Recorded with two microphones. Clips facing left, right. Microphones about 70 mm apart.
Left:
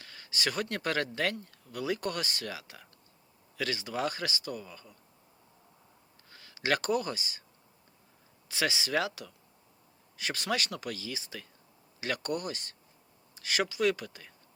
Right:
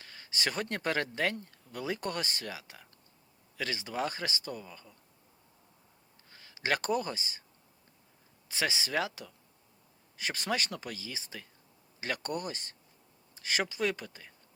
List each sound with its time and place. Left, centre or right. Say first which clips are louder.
0.0 s a sound: left 1 dB; right
0.9 s speech: even; centre
6.4 s speech: left 2 dB; centre
8.4 s speech: left 2 dB; right